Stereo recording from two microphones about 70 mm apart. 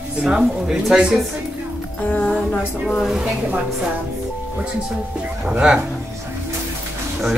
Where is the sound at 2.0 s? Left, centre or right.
Left.